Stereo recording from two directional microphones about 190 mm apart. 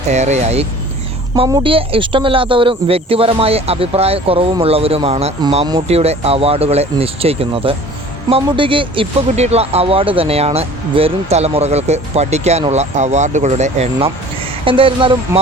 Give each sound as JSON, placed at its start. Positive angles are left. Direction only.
{"t": 0.1, "sound": "speech", "side_deg": -35}
{"t": 1.4, "sound": "speech", "side_deg": -25}